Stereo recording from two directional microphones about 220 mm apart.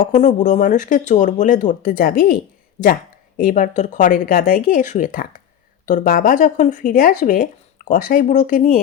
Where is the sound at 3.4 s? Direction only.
35° left (ahead or behind).